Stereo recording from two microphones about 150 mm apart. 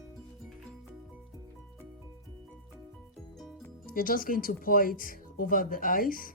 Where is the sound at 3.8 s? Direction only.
70° left (ahead or behind).